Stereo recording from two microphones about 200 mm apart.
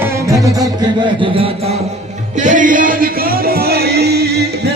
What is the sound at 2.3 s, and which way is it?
Music, 40° right (ahead or behind).